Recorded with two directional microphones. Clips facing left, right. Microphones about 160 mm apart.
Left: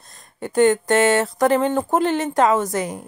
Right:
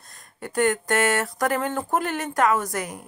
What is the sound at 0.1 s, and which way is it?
Speech, 25° left (ahead or behind).